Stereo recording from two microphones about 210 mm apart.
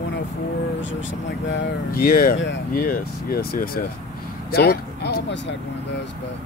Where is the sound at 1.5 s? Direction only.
45° left (ahead or behind).